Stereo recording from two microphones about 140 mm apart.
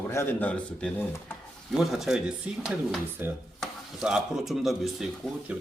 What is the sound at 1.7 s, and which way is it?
A man's voice, centre (ahead or behind).